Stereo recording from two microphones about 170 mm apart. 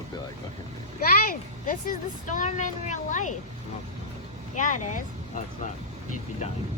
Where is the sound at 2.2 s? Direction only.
50° left (ahead or behind).